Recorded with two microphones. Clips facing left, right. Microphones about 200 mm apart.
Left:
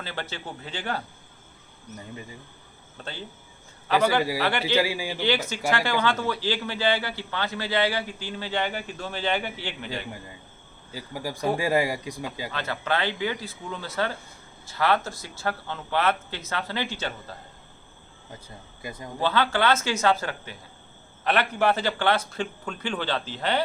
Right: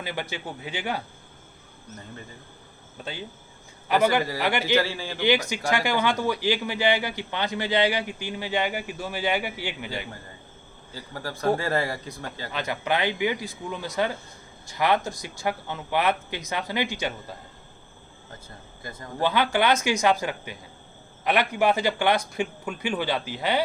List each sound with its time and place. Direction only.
0.0 s a man's voice: 15° right (ahead or behind)
3.0 s a man's voice: 15° right (ahead or behind)
4.6 s speech: 10° left (ahead or behind)
5.7 s a man's voice: 15° right (ahead or behind)
10.9 s speech: 10° left (ahead or behind)
12.5 s a man's voice: 15° right (ahead or behind)
18.3 s speech: 15° left (ahead or behind)
19.2 s a man's voice: 15° right (ahead or behind)